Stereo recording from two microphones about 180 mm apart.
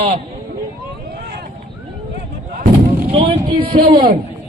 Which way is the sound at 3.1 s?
30° right (ahead or behind).